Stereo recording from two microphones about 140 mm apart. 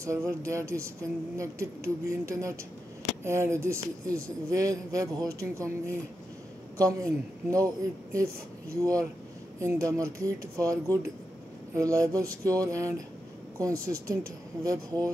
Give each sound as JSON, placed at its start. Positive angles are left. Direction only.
{"t": 0.0, "sound": "speech", "side_deg": -20}